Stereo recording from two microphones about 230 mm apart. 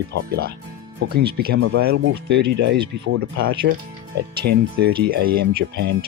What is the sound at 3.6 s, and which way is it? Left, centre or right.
Speech, right.